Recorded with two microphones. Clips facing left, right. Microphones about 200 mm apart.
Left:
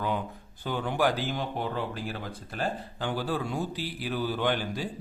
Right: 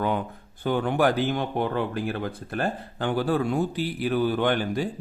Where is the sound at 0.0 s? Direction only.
55° right (ahead or behind).